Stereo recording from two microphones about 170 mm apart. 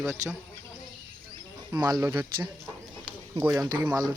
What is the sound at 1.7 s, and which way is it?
Speech, 25° right (ahead or behind).